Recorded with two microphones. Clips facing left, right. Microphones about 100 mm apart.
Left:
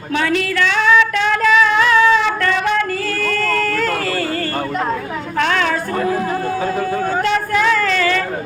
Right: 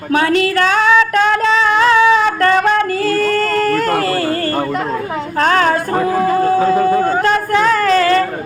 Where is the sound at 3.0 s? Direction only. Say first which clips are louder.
Right 6 dB; 45° right (ahead or behind).